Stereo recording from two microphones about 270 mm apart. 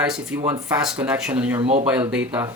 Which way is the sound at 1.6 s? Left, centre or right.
Right.